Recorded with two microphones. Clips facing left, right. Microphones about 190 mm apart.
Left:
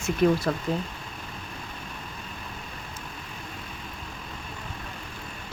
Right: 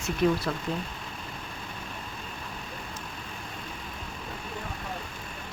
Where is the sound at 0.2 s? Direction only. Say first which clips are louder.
Left 3 dB; 55° left (ahead or behind).